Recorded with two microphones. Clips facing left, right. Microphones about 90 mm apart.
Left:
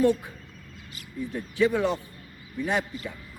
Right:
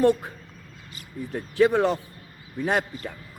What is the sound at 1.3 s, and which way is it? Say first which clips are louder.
Speech: right 4 dB; 50° right (ahead or behind).